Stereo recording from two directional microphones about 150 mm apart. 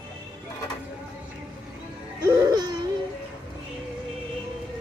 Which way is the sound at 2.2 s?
25° right (ahead or behind).